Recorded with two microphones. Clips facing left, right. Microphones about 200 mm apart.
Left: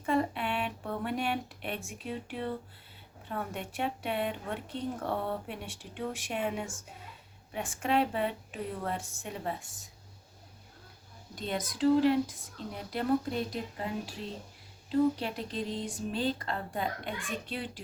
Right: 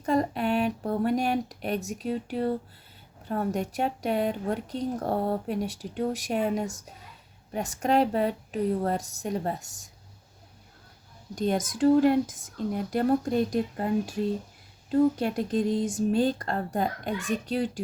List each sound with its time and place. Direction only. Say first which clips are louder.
0.0 s speech: right 4 dB; 40° right (ahead or behind)
11.3 s speech: right 7 dB; 45° right (ahead or behind)